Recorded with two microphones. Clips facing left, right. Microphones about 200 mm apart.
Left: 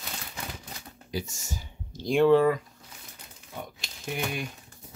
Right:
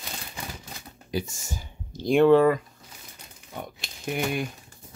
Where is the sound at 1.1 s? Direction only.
55° right (ahead or behind).